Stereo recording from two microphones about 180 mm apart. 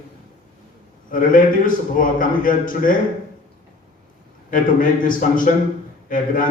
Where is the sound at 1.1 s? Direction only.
50° left (ahead or behind).